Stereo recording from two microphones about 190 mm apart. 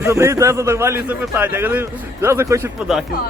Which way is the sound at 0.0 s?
15° right (ahead or behind).